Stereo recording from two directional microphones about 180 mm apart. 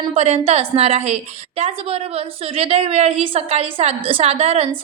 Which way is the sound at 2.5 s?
35° right (ahead or behind).